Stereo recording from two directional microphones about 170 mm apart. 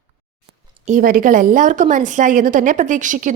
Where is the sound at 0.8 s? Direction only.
50° right (ahead or behind).